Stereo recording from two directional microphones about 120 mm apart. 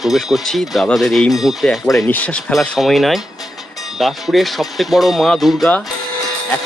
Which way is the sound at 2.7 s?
Centre (ahead or behind).